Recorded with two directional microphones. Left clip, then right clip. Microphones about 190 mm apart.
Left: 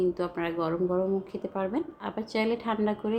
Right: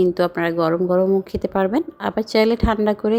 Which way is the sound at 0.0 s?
45° right (ahead or behind).